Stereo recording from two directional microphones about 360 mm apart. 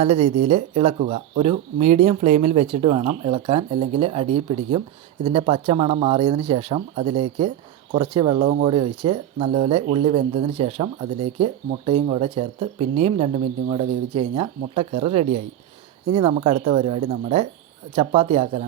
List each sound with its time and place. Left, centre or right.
0.0 s speech: centre